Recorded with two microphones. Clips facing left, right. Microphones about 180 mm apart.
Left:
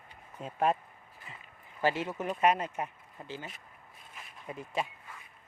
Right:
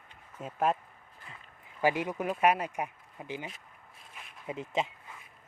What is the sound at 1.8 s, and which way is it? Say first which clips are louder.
Speech: right 2 dB; 15° right (ahead or behind).